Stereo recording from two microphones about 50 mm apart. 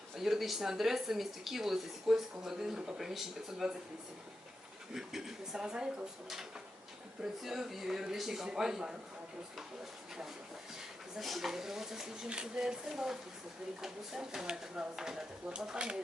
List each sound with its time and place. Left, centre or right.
0.2 s speech: centre
4.9 s speech: centre
11.2 s speech: centre